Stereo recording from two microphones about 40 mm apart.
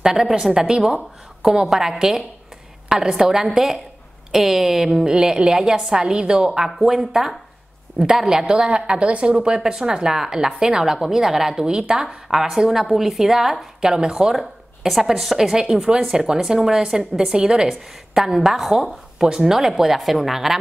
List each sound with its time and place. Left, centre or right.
0.0 s a woman's voice: centre
13.8 s a woman's voice: centre